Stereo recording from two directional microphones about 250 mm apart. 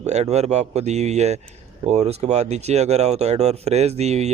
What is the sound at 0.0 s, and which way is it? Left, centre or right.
Speech, right.